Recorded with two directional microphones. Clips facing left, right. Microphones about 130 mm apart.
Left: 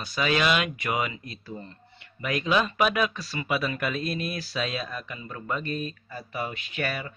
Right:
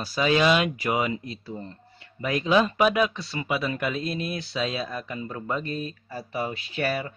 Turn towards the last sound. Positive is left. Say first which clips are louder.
# right 4 dB
turn(degrees=-30)  # may be behind; listen again after turning